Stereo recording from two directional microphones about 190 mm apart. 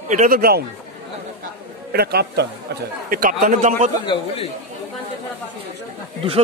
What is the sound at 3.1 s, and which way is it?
Speech, 45° right (ahead or behind).